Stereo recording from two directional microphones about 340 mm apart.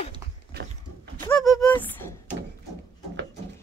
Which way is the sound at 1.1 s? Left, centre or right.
Centre.